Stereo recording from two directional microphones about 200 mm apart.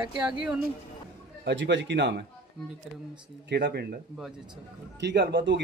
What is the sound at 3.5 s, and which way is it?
Speech, 55° right (ahead or behind).